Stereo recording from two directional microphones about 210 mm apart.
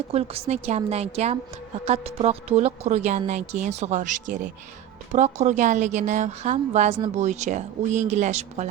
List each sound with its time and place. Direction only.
0.1 s a woman's voice: 30° right (ahead or behind)